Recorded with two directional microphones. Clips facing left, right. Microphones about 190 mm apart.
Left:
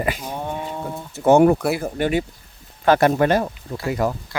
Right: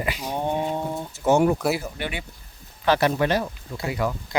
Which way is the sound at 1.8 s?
45° left (ahead or behind).